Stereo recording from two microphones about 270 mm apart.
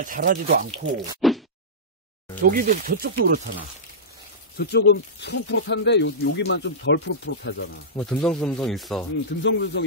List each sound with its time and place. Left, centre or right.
0.0 s speech: right
1.2 s a sound: centre
2.4 s speech: right
4.6 s speech: left
8.0 s speech: centre
9.4 s speech: left